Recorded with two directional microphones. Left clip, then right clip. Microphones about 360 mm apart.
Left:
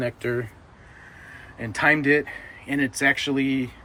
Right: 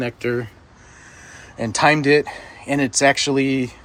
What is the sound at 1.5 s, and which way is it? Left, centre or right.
Speech, centre.